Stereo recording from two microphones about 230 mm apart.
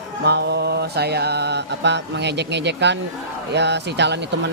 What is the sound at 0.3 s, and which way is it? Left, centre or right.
Mantra, right.